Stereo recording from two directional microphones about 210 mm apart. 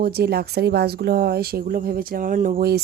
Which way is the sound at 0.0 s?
50° right (ahead or behind).